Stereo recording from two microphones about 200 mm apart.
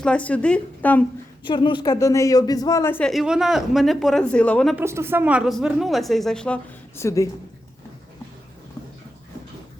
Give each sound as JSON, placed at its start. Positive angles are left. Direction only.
{"t": 0.0, "sound": "a woman's voice", "side_deg": 5}
{"t": 1.5, "sound": "a woman's voice", "side_deg": 25}
{"t": 4.8, "sound": "speech", "side_deg": -10}